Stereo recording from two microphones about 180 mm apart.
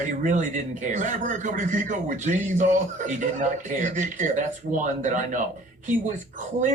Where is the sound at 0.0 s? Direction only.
45° right (ahead or behind).